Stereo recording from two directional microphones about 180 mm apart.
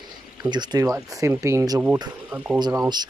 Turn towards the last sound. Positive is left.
turn(degrees=-20)  # may be behind; listen again after turning